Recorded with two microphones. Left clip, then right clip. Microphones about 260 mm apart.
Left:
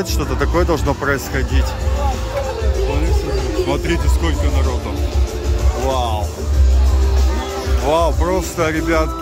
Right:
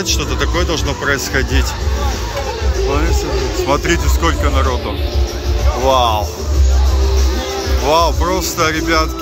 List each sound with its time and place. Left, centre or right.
0.0 s speech: centre
3.6 s speech: centre
5.9 s speech: centre
7.8 s speech: centre